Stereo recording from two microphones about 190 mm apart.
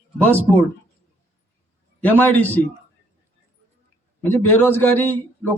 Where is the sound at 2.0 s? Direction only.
10° left (ahead or behind).